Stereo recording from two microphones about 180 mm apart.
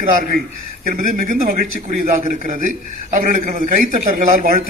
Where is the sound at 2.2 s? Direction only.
40° right (ahead or behind).